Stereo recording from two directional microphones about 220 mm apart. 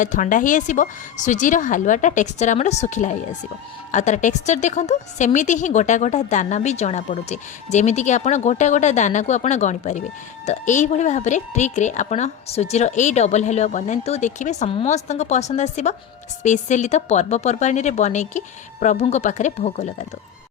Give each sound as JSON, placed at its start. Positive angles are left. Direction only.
{"t": 0.0, "sound": "a woman's voice", "side_deg": 35}